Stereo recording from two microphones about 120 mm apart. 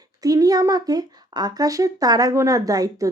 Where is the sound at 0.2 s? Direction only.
30° right (ahead or behind).